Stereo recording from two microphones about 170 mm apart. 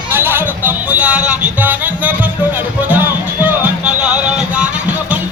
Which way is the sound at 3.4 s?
10° right (ahead or behind).